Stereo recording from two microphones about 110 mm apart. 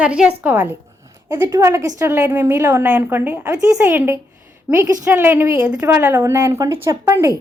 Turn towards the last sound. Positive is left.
turn(degrees=-30)  # may be behind; listen again after turning